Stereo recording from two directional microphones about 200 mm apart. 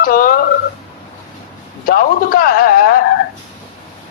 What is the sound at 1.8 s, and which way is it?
Speech, 45° left (ahead or behind).